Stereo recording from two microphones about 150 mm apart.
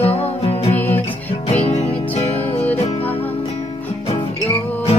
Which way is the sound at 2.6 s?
10° left (ahead or behind).